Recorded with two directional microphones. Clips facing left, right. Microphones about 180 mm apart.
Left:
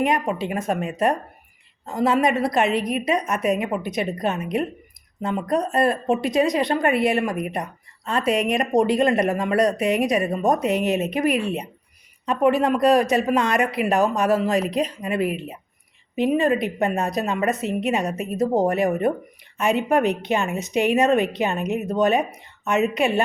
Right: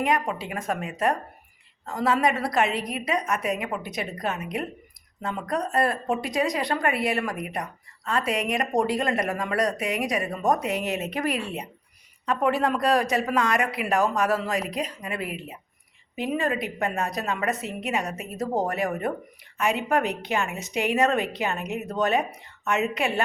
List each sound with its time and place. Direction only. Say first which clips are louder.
0.0 s speech: left 4 dB; 20° left (ahead or behind)